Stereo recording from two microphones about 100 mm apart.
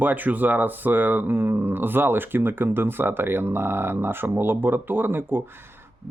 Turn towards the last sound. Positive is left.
turn(degrees=-20)  # may be behind; listen again after turning